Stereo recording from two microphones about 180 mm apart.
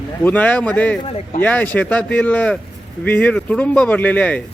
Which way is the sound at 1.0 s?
30° left (ahead or behind).